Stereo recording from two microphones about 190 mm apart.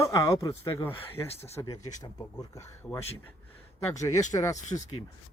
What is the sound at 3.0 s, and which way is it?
Speech, 30° left (ahead or behind).